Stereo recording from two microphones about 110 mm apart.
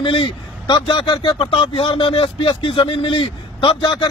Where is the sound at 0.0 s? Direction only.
50° left (ahead or behind).